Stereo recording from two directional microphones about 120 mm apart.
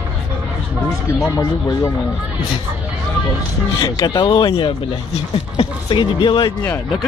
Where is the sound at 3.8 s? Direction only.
35° left (ahead or behind).